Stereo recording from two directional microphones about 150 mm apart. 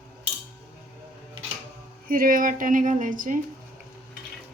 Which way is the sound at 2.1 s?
70° right (ahead or behind).